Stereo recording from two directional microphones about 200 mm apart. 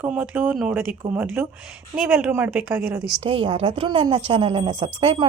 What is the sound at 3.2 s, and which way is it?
A woman's voice, 25° right (ahead or behind).